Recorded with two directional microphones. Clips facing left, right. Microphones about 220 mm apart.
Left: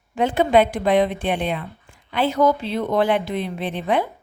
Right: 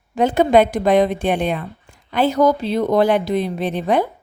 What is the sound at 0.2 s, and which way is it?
A woman's voice, 40° right (ahead or behind).